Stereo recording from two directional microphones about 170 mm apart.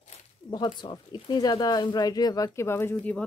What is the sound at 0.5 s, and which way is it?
Speech, 25° left (ahead or behind).